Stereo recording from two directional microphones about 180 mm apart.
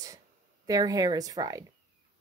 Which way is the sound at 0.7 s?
20° right (ahead or behind).